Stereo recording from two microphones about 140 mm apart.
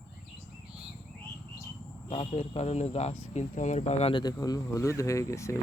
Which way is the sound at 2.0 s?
50° left (ahead or behind).